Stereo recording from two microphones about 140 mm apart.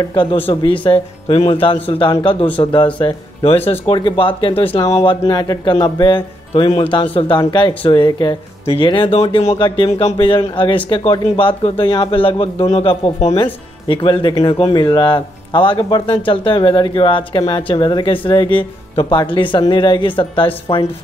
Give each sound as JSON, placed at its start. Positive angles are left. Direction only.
{"t": 0.1, "sound": "speech", "side_deg": 35}
{"t": 5.2, "sound": "speech", "side_deg": 25}
{"t": 9.6, "sound": "speech", "side_deg": 35}